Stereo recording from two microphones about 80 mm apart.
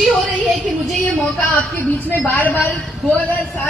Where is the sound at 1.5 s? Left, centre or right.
Left.